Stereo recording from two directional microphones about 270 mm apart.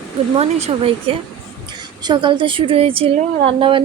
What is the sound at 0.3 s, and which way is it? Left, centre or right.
A woman's voice, right.